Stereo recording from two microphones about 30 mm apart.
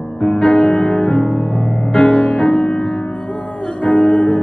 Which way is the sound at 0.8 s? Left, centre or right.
Left.